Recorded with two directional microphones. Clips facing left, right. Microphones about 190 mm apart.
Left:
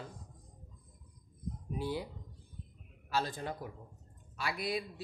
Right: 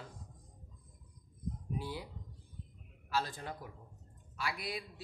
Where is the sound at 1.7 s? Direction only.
25° left (ahead or behind).